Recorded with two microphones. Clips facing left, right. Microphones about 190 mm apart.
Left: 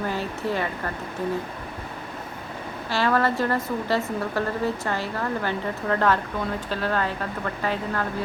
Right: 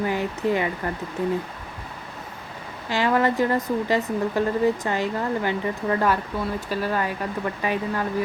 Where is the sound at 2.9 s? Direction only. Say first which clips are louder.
Right 1 dB; 15° right (ahead or behind).